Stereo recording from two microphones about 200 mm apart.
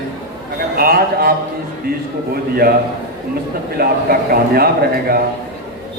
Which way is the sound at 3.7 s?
50° right (ahead or behind).